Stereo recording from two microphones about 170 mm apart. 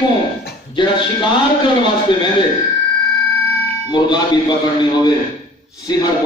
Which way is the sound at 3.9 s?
25° left (ahead or behind).